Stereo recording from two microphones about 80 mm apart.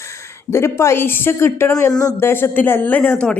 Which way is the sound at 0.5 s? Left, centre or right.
Left.